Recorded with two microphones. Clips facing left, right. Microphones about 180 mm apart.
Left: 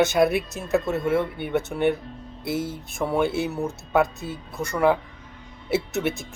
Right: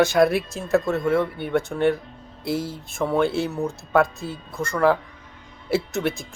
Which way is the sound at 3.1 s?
5° left (ahead or behind).